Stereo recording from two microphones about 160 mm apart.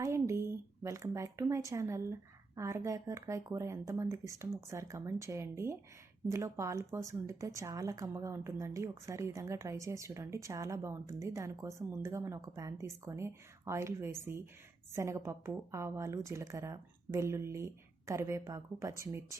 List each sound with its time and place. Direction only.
0.0 s a woman's voice: 15° right (ahead or behind)